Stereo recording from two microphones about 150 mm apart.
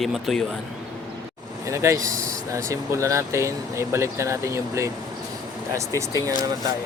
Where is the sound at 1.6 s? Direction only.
20° right (ahead or behind).